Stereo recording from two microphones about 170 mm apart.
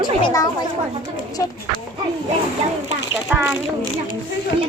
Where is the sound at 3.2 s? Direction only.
10° right (ahead or behind).